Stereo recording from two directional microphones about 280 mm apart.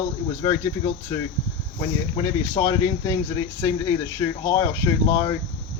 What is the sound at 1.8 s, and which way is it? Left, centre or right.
Speech, centre.